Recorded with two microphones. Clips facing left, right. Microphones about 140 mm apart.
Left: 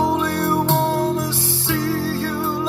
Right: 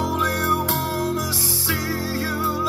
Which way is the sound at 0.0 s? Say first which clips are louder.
Left 4 dB; 30° left (ahead or behind).